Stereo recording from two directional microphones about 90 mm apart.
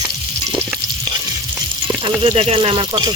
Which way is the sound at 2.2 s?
90° right.